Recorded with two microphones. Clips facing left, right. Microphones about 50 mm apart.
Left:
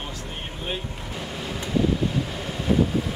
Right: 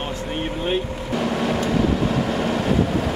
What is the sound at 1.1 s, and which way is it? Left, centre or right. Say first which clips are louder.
Vehicle: right 12 dB; right.